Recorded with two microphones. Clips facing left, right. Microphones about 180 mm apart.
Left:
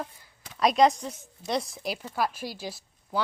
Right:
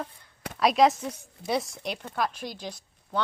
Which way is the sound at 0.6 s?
Centre (ahead or behind).